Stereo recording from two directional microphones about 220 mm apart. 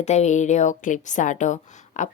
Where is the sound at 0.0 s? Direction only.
30° left (ahead or behind).